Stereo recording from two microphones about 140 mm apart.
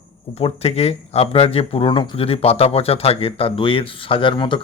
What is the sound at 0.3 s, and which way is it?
Speech, 45° left (ahead or behind).